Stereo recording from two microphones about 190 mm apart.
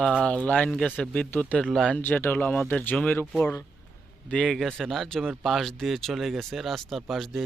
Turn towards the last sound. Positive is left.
turn(degrees=0)  # may be behind; listen again after turning